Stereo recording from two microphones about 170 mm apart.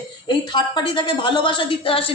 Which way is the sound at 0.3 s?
30° left (ahead or behind).